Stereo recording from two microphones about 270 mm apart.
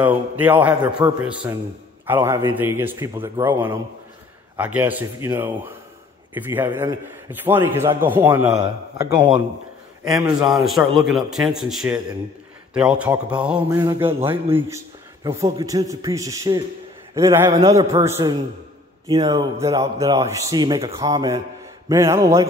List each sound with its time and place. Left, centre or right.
0.0 s a man's voice: centre
10.5 s a man's voice: centre